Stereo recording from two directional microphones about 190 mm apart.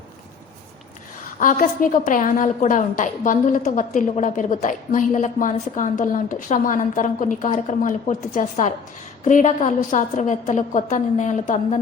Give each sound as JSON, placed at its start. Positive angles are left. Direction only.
{"t": 1.4, "sound": "a woman's voice", "side_deg": 45}